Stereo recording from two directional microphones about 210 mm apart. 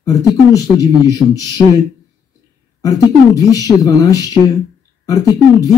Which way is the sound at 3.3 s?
15° left (ahead or behind).